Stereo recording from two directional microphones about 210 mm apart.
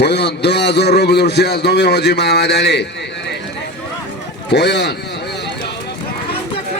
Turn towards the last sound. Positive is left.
turn(degrees=55)  # may be behind; listen again after turning